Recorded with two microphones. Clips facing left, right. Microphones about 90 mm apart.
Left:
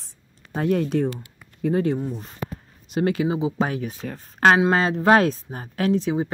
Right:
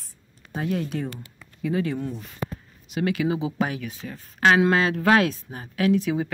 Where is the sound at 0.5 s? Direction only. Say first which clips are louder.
Left 6 dB; 50° left (ahead or behind).